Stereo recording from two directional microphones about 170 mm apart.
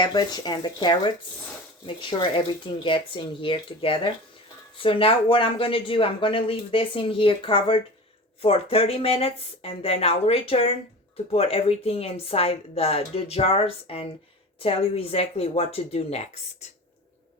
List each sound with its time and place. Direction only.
0.0 s speech: 25° left (ahead or behind); by 16.6 s 40° left (ahead or behind)